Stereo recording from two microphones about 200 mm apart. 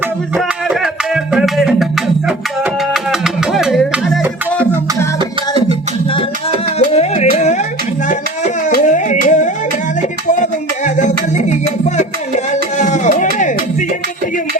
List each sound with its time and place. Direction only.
0.3 s music: 5° right (ahead or behind)
2.9 s music: centre (ahead or behind)
6.7 s music: 30° left (ahead or behind)
8.7 s music: 40° left (ahead or behind)
12.8 s music: 35° left (ahead or behind)